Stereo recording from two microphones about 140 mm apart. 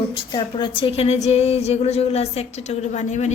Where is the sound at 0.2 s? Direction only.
35° left (ahead or behind).